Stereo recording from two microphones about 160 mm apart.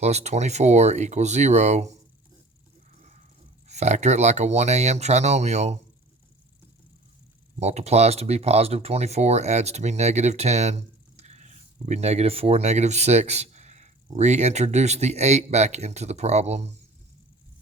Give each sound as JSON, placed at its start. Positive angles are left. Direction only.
{"t": 0.0, "sound": "speech", "side_deg": -45}
{"t": 3.0, "sound": "a sound", "side_deg": -50}
{"t": 3.7, "sound": "speech", "side_deg": -45}
{"t": 7.6, "sound": "speech", "side_deg": -45}